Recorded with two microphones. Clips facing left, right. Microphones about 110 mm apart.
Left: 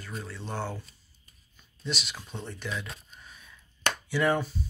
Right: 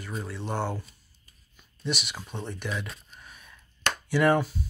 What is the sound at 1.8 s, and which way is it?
Speech, 15° right (ahead or behind).